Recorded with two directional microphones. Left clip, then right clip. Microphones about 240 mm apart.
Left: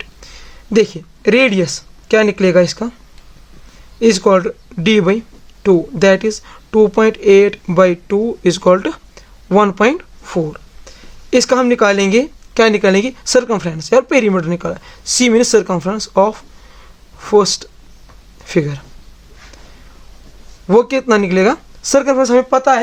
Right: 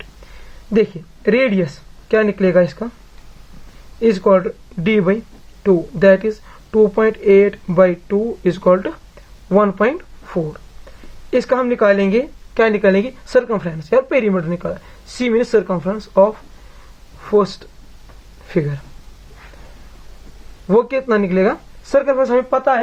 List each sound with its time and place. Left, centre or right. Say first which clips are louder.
0.7 s speech: left 3 dB; left
4.0 s speech: left 2 dB; left
20.7 s speech: left 3 dB; left